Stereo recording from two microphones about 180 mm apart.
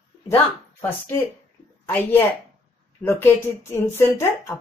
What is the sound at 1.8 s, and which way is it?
Speech, 10° left (ahead or behind).